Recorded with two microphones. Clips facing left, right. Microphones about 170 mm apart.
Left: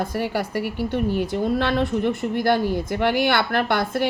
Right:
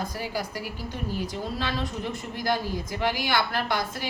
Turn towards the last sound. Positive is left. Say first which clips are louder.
# left 8 dB
turn(degrees=60)  # may be behind; listen again after turning